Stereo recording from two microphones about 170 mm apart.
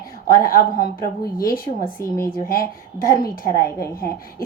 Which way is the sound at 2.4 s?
60° left (ahead or behind).